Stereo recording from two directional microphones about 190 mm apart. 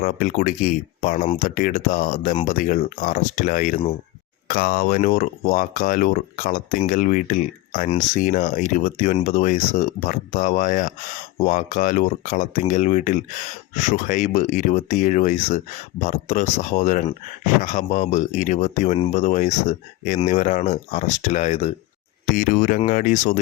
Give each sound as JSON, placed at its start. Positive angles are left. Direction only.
{"t": 0.0, "sound": "speech", "side_deg": 45}